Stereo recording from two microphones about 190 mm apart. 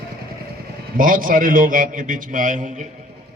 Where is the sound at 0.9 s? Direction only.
45° right (ahead or behind).